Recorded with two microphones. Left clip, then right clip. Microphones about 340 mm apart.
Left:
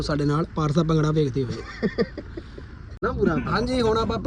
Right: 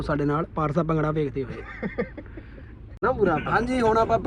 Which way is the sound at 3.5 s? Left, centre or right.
Centre.